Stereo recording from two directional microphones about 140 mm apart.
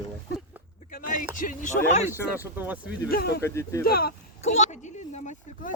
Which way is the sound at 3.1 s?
90° left.